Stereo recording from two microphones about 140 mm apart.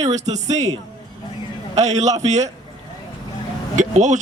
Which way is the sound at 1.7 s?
55° right (ahead or behind).